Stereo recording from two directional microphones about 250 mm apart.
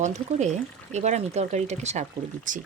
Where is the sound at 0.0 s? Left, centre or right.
Right.